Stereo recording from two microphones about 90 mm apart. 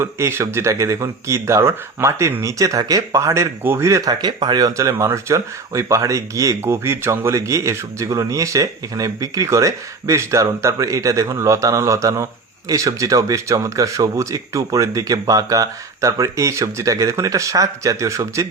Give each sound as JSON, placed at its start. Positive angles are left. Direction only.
{"t": 0.0, "sound": "speech", "side_deg": -25}